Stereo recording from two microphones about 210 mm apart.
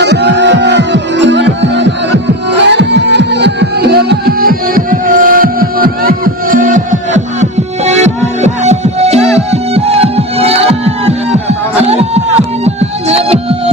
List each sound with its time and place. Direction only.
0.0 s music: 55° right (ahead or behind); by 13.6 s 25° right (ahead or behind)